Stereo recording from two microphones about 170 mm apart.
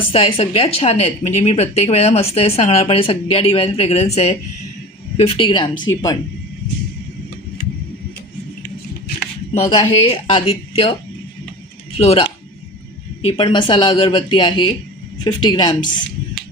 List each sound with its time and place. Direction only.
0.1 s speech: 30° left (ahead or behind)
9.6 s speech: 35° left (ahead or behind)
11.9 s speech: 35° left (ahead or behind)